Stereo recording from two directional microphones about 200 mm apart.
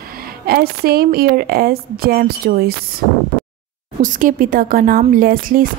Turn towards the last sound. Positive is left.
turn(degrees=-45)  # may be behind; listen again after turning